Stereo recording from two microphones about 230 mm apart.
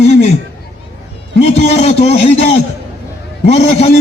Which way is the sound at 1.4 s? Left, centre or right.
Left.